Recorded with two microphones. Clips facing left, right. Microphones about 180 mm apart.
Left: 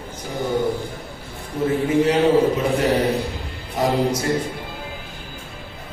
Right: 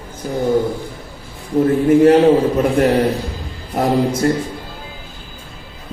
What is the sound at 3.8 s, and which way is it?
Speech, 55° right (ahead or behind).